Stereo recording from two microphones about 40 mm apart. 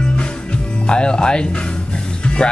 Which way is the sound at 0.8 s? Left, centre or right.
Left.